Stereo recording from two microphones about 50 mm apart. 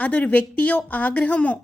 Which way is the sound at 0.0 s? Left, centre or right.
Left.